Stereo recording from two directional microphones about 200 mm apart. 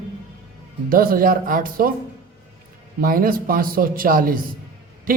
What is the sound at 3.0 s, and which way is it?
A man's voice, 45° right (ahead or behind).